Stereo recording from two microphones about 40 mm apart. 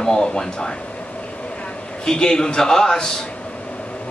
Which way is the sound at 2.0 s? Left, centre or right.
Centre.